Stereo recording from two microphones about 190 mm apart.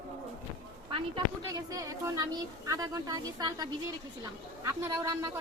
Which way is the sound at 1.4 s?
15° right (ahead or behind).